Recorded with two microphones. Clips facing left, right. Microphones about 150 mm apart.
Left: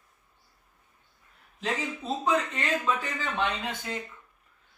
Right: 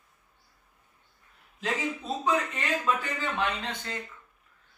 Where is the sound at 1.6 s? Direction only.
Centre (ahead or behind).